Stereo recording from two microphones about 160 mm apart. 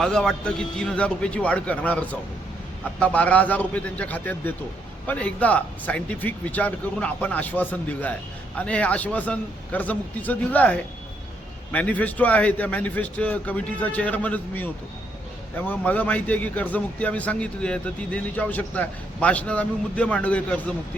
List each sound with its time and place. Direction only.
0.0 s a man's voice: 5° left (ahead or behind)